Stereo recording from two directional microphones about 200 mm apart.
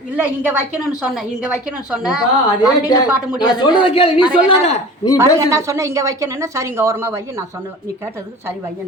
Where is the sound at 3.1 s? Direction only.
5° right (ahead or behind).